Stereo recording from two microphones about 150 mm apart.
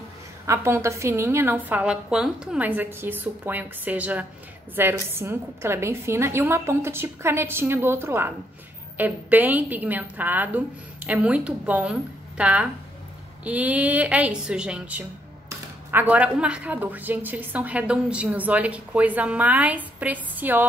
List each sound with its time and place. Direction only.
0.5 s a woman's voice: 15° right (ahead or behind)